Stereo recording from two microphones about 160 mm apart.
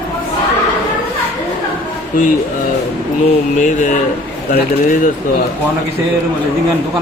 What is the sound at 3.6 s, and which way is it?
Speech, 50° left (ahead or behind).